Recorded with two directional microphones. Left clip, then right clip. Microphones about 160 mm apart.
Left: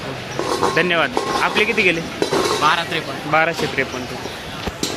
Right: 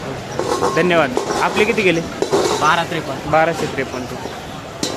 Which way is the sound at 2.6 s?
35° right (ahead or behind).